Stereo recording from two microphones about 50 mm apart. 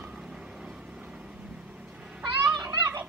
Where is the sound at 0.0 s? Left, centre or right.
Centre.